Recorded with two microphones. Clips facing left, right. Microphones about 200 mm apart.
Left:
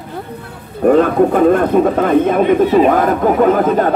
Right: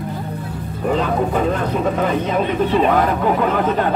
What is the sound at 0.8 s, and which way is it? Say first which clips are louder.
Music: left 9 dB; 55° left (ahead or behind).